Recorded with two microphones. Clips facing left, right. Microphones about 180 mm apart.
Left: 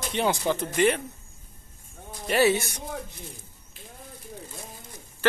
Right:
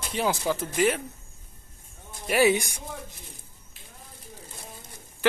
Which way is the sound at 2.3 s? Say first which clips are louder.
Even; 15° right (ahead or behind).